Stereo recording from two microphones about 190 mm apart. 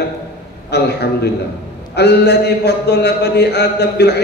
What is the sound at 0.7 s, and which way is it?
A man's voice, 60° left (ahead or behind).